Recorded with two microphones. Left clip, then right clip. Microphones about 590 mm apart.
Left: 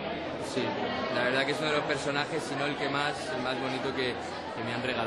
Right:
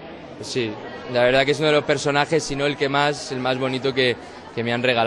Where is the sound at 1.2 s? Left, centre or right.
Right.